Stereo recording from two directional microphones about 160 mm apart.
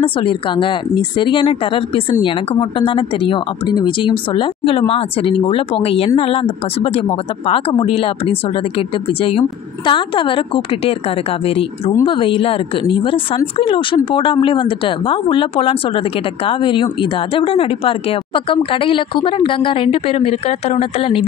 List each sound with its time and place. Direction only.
0.0 s a woman's voice: 30° left (ahead or behind)